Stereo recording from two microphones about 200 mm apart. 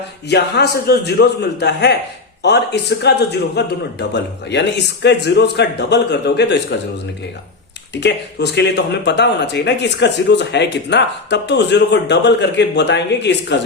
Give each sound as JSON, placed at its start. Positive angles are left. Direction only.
{"t": 0.3, "sound": "speech", "side_deg": 55}
{"t": 8.0, "sound": "speech", "side_deg": 60}